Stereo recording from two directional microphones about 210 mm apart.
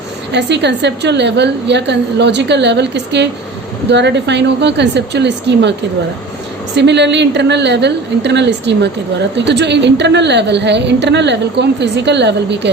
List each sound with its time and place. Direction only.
0.3 s a woman's voice: 55° right (ahead or behind)
6.7 s a woman's voice: 55° right (ahead or behind)